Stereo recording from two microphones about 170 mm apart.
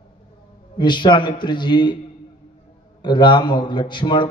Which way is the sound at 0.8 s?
25° left (ahead or behind).